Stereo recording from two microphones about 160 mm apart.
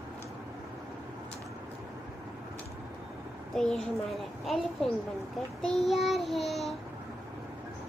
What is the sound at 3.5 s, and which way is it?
A child's voice, centre (ahead or behind).